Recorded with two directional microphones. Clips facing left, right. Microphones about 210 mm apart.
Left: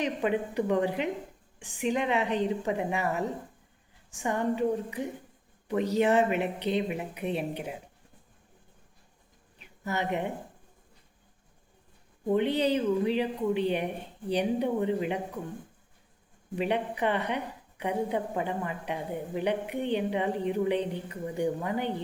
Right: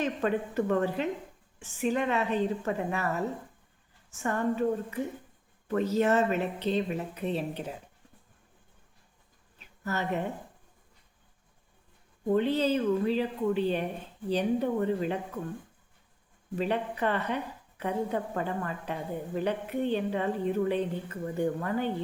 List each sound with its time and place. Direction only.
0.0 s a woman's voice: 15° left (ahead or behind)
9.6 s a sound: 15° left (ahead or behind)
12.3 s a woman's voice: 15° left (ahead or behind)
16.6 s a woman's voice: 15° left (ahead or behind)